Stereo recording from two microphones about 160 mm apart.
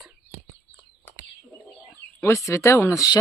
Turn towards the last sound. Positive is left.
turn(degrees=20)  # may be behind; listen again after turning